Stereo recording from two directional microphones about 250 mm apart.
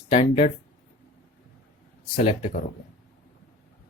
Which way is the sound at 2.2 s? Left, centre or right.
Left.